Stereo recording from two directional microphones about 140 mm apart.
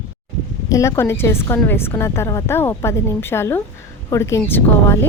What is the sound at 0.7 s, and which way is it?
A woman's voice, 20° left (ahead or behind).